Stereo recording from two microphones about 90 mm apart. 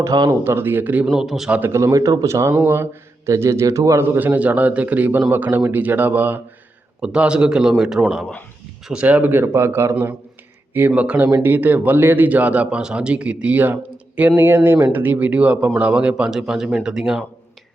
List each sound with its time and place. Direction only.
0.3 s speech: 25° right (ahead or behind)
1.0 s speech: 5° right (ahead or behind)
1.5 s a man's voice: 15° right (ahead or behind)
1.7 s a man's voice: 35° right (ahead or behind)
4.2 s a man's voice: 20° right (ahead or behind)
9.0 s a man's voice: 20° right (ahead or behind)